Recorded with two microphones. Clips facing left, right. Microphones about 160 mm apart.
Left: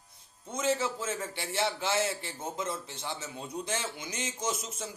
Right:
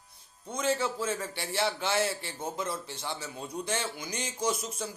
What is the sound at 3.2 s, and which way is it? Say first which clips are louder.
A man's voice: right 1 dB; 25° left (ahead or behind).